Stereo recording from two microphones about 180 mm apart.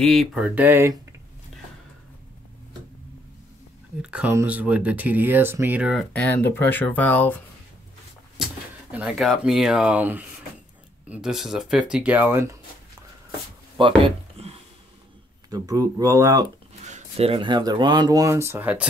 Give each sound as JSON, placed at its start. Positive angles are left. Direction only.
{"t": 0.0, "sound": "speech", "side_deg": 0}
{"t": 4.0, "sound": "speech", "side_deg": -5}
{"t": 6.1, "sound": "speech", "side_deg": 10}
{"t": 8.4, "sound": "a sound", "side_deg": -5}
{"t": 8.9, "sound": "speech", "side_deg": -5}
{"t": 13.7, "sound": "a sound", "side_deg": -30}
{"t": 15.5, "sound": "speech", "side_deg": -20}
{"t": 16.8, "sound": "speech", "side_deg": -35}